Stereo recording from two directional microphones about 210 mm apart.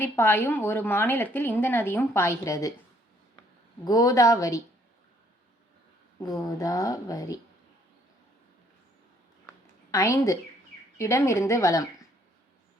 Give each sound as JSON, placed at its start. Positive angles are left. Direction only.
{"t": 0.0, "sound": "a woman's voice", "side_deg": 10}
{"t": 3.8, "sound": "a woman's voice", "side_deg": 15}
{"t": 6.1, "sound": "a woman's voice", "side_deg": 15}
{"t": 9.9, "sound": "a woman's voice", "side_deg": 15}